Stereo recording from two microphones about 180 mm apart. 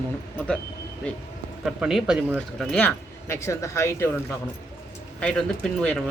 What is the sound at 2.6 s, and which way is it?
Speech, 5° left (ahead or behind).